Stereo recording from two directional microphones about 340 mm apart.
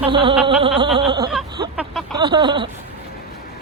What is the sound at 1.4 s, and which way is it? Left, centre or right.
Vehicle, centre.